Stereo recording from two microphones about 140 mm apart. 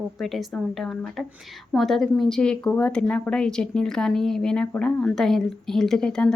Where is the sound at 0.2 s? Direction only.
Centre (ahead or behind).